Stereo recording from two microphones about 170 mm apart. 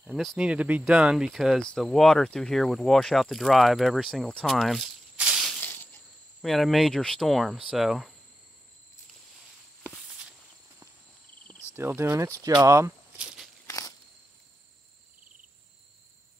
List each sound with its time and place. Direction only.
0.0 s speech: centre (ahead or behind)
5.6 s insect: 10° left (ahead or behind)
6.4 s speech: centre (ahead or behind)
11.7 s speech: 15° right (ahead or behind)
13.7 s a sound: 20° left (ahead or behind)